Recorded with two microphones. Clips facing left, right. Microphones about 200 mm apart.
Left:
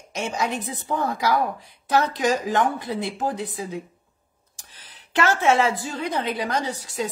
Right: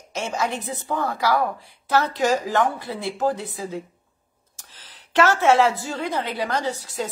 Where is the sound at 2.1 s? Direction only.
15° left (ahead or behind).